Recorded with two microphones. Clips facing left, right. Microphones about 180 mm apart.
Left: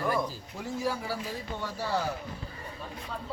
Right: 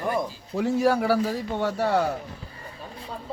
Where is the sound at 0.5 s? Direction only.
70° right (ahead or behind).